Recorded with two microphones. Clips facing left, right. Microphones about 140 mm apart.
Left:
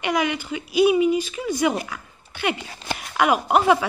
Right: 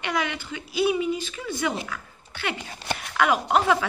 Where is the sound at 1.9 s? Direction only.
15° left (ahead or behind).